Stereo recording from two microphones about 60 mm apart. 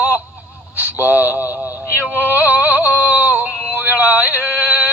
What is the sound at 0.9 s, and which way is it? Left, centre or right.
Speech, right.